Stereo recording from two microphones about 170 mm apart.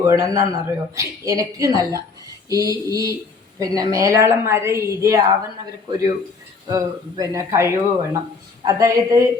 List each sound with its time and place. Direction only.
0.0 s a woman's voice: 15° right (ahead or behind)
6.7 s a woman's voice: 20° right (ahead or behind)